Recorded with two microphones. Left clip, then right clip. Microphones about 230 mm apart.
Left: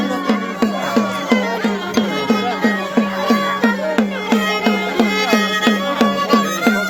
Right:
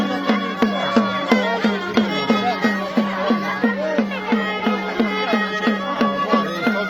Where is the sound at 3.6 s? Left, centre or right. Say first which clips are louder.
Left 3 dB; left.